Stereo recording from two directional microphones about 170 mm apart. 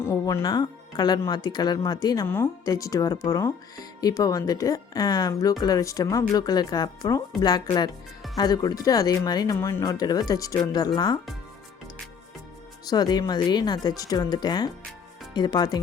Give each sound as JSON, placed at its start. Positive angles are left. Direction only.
{"t": 0.0, "sound": "speech", "side_deg": 15}
{"t": 12.8, "sound": "speech", "side_deg": 25}